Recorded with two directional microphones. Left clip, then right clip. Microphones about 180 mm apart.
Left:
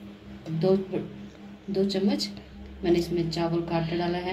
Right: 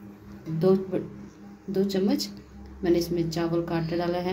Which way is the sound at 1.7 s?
60° right (ahead or behind).